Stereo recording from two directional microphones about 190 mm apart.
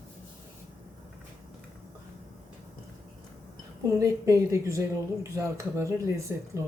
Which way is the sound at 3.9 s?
15° right (ahead or behind).